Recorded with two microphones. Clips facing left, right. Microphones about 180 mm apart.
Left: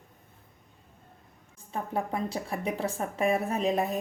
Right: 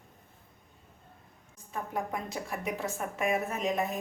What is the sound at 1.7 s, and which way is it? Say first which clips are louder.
A woman's voice: left 3 dB; 30° left (ahead or behind).